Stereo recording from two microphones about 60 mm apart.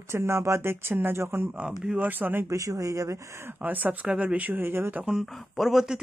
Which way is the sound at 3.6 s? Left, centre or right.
Right.